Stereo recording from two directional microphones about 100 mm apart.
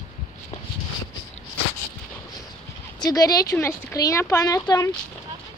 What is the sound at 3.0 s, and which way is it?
Speech, 40° left (ahead or behind).